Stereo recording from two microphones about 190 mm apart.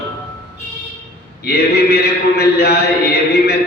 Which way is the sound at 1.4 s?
55° left (ahead or behind).